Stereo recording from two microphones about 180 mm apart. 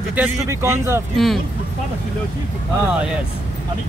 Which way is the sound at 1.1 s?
Centre (ahead or behind).